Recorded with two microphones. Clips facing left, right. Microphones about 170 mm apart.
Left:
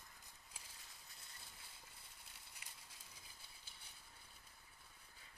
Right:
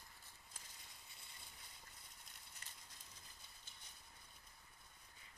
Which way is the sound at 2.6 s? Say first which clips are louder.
Even; 10° left (ahead or behind).